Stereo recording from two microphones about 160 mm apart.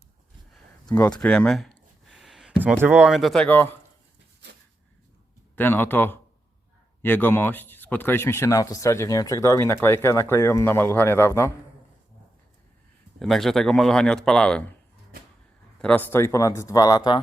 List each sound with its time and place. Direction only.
0.9 s speech: 20° left (ahead or behind)
5.5 s speech: 10° left (ahead or behind)
13.1 s speech: centre (ahead or behind)
15.8 s speech: 10° left (ahead or behind); by 17.2 s 25° left (ahead or behind)